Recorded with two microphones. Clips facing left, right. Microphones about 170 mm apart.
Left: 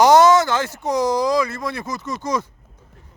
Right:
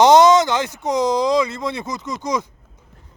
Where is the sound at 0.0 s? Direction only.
20° right (ahead or behind).